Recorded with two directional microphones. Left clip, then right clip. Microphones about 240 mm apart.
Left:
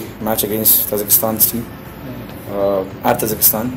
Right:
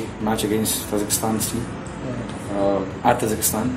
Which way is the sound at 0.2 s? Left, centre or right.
Left.